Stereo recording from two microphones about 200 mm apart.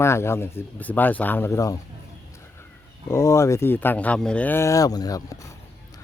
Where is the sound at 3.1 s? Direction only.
15° left (ahead or behind).